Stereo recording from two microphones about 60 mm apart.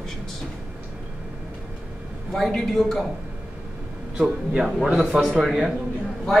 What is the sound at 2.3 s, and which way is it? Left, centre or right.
Speech, centre.